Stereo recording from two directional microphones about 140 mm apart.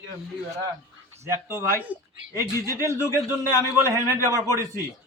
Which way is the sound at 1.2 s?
20° right (ahead or behind).